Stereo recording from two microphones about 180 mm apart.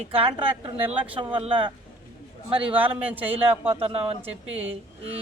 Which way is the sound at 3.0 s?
10° right (ahead or behind).